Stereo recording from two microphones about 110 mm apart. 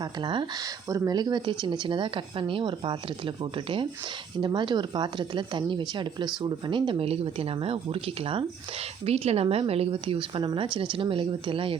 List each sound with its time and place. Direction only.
0.0 s speech: 45° right (ahead or behind)
0.9 s speech: 30° right (ahead or behind); by 8.4 s 55° right (ahead or behind)
9.0 s speech: 65° right (ahead or behind)